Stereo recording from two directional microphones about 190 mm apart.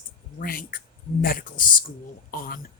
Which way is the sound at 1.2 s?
50° left (ahead or behind).